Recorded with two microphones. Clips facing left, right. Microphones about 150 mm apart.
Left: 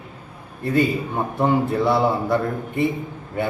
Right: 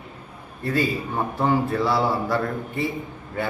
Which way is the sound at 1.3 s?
25° left (ahead or behind).